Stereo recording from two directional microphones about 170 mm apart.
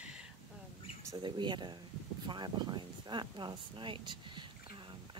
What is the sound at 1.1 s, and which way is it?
Speech, 25° right (ahead or behind).